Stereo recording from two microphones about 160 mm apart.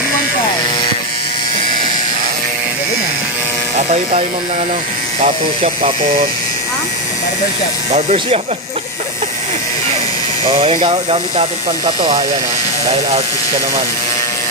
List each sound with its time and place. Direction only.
5.2 s speech: 40° right (ahead or behind)
7.9 s speech: 40° right (ahead or behind)
10.5 s speech: 35° right (ahead or behind)